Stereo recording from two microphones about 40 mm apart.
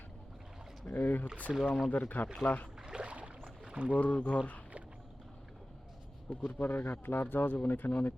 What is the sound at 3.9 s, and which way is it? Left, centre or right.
Speech, left.